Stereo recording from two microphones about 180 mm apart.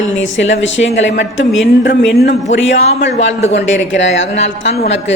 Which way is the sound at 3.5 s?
90° left.